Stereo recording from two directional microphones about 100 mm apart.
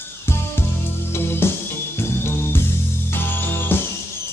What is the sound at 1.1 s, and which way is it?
Music, 25° left (ahead or behind).